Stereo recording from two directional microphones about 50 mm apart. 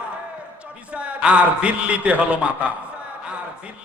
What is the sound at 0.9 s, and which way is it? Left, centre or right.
A man's voice, right.